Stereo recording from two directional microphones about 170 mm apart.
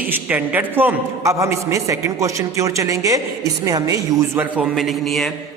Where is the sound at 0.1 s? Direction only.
10° right (ahead or behind).